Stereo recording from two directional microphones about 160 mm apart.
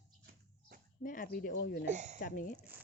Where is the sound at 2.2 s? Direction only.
60° left (ahead or behind).